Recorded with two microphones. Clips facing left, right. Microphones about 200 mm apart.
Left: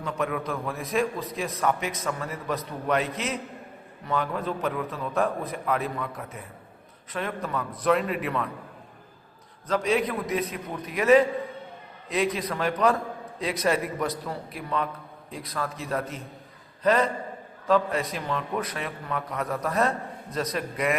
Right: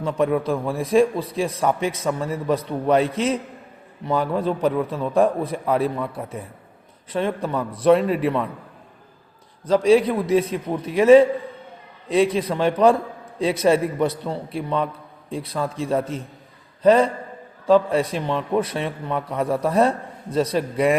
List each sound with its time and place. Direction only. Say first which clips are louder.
0.0 s a man's voice: right 8 dB; 30° right (ahead or behind)
9.6 s a man's voice: right 9 dB; 30° right (ahead or behind)